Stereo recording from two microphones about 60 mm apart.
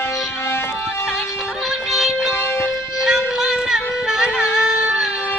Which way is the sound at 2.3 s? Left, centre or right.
Left.